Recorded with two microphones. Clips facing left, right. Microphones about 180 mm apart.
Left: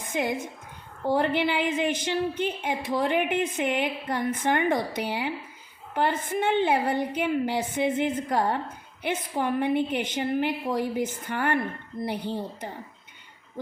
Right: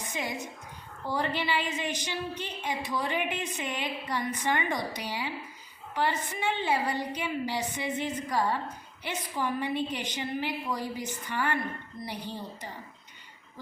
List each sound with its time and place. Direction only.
0.0 s a woman's voice: 55° left (ahead or behind)